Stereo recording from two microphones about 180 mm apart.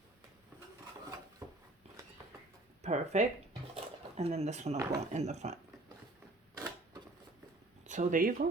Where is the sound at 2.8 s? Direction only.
40° right (ahead or behind).